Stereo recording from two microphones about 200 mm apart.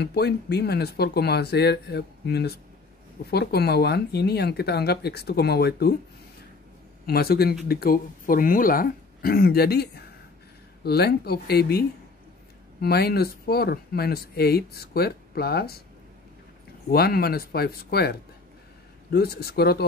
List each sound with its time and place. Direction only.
0.0 s speech: 55° left (ahead or behind)
7.1 s speech: 50° left (ahead or behind)
12.8 s speech: 50° left (ahead or behind)
16.9 s speech: 50° left (ahead or behind)